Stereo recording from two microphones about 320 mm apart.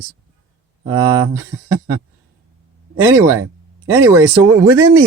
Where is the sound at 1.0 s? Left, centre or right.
Centre.